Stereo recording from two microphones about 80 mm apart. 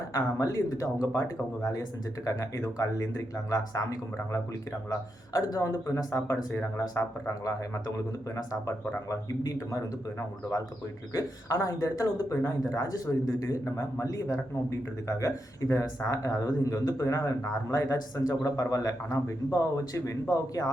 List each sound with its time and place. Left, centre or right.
0.1 s a man's voice: left